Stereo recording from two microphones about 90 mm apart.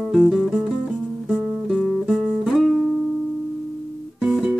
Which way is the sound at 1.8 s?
5° left (ahead or behind).